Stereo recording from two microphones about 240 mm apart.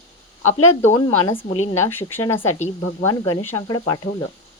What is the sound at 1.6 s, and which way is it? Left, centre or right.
Speech, left.